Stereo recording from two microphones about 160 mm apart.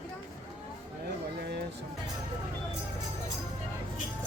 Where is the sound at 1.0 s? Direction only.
90° right.